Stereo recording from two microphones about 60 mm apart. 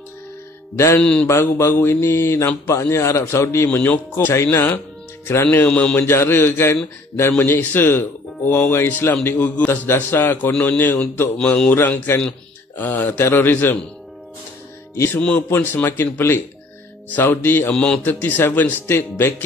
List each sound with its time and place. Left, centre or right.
1.2 s speech: left
3.6 s speech: left
4.3 s speech: left
5.7 s mantra: centre
5.9 s speech: left
11.3 s mantra: centre
11.7 s a man's voice: left
15.1 s a man's voice: centre
15.5 s speech: left